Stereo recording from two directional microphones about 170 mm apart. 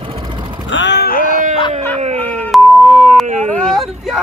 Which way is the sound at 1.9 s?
40° right (ahead or behind).